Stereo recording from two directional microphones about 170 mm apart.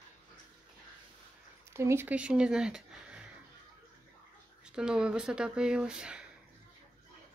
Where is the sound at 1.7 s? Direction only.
15° right (ahead or behind).